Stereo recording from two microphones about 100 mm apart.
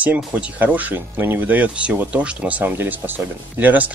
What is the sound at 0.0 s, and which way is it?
Speech, 15° right (ahead or behind).